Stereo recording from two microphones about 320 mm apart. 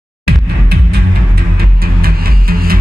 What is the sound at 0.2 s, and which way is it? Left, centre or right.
Music, right.